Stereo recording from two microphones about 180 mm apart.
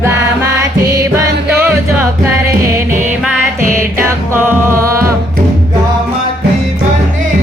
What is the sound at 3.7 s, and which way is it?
Music, 15° right (ahead or behind).